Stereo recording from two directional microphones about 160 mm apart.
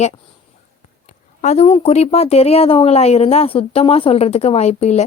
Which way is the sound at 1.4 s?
45° left (ahead or behind).